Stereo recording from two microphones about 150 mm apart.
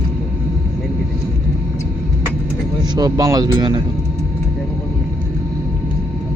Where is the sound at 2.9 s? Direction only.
25° right (ahead or behind).